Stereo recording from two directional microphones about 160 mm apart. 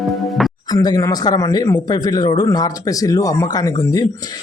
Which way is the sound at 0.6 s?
25° left (ahead or behind).